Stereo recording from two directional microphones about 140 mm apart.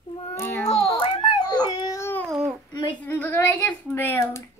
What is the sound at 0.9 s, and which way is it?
Crying, 40° left (ahead or behind).